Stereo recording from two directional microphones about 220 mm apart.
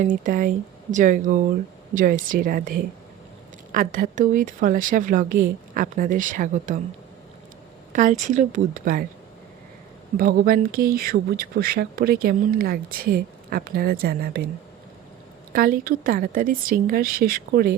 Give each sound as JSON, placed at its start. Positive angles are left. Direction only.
{"t": 0.0, "sound": "a woman's voice", "side_deg": -35}
{"t": 7.9, "sound": "a woman's voice", "side_deg": -35}
{"t": 10.2, "sound": "speech", "side_deg": -40}
{"t": 15.5, "sound": "a woman's voice", "side_deg": -40}